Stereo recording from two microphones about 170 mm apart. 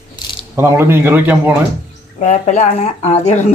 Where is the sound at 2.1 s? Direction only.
45° left (ahead or behind).